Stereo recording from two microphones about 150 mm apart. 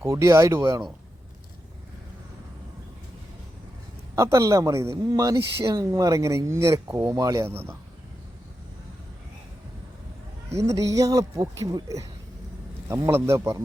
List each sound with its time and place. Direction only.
0.0 s speech: 20° right (ahead or behind)
4.1 s speech: 20° right (ahead or behind)
10.5 s speech: 20° right (ahead or behind)
13.1 s speech: 15° right (ahead or behind)